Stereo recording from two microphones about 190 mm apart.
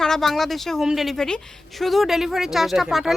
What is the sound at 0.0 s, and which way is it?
A woman's voice, centre (ahead or behind).